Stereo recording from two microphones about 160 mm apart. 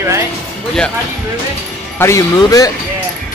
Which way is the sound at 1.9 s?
20° left (ahead or behind).